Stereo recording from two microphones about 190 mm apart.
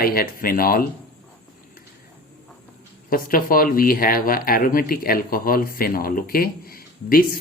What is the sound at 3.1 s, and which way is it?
Speech, 50° left (ahead or behind).